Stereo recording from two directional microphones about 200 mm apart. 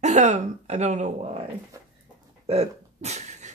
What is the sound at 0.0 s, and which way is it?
Speech, 35° right (ahead or behind).